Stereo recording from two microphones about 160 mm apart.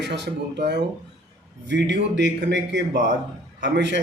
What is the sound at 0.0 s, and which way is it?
A man's voice, 90° right.